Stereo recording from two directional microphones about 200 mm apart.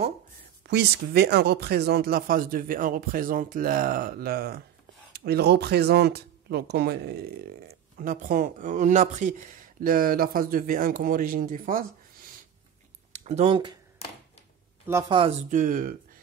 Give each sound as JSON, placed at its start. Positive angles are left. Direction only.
{"t": 0.7, "sound": "speech", "side_deg": -55}
{"t": 13.1, "sound": "a sound", "side_deg": -35}
{"t": 14.9, "sound": "speech", "side_deg": -15}
{"t": 15.5, "sound": "speech", "side_deg": -45}